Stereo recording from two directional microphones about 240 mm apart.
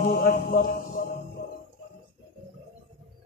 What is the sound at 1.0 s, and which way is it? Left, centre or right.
Music, left.